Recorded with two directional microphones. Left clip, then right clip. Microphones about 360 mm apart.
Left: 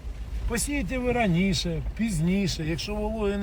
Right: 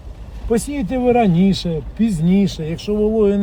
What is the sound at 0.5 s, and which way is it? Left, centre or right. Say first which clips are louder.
Speech: right 10 dB; centre.